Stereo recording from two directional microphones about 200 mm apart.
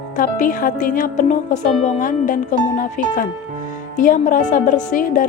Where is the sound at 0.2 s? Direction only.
40° left (ahead or behind).